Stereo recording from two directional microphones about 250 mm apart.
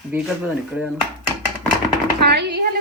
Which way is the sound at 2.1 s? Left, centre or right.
Right.